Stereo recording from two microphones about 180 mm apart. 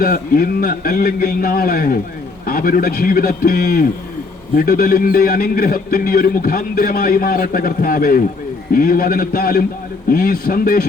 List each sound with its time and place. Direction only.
0.0 s a man's voice: 55° left (ahead or behind)